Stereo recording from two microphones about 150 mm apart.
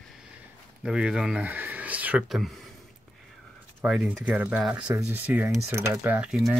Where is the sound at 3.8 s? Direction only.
5° right (ahead or behind).